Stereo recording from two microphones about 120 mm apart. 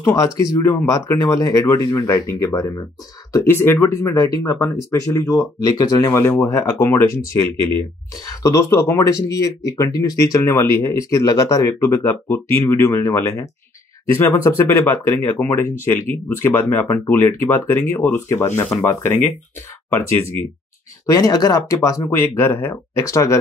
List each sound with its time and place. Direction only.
0.0 s speech: 30° left (ahead or behind)
6.0 s speech: 20° left (ahead or behind)
8.3 s speech: 30° left (ahead or behind)
17.1 s speech: 15° left (ahead or behind)
21.0 s speech: 30° left (ahead or behind)